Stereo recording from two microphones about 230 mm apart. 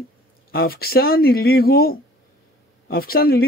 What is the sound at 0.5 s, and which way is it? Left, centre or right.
A man's voice, left.